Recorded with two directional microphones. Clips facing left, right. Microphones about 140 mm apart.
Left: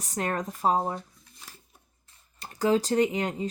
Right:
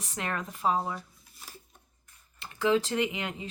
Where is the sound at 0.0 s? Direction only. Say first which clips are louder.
Left 5 dB; 40° left (ahead or behind).